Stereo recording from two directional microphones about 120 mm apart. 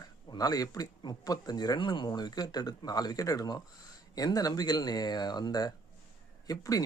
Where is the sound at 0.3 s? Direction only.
30° left (ahead or behind).